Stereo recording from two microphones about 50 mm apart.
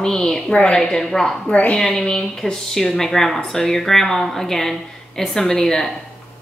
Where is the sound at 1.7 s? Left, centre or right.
Centre.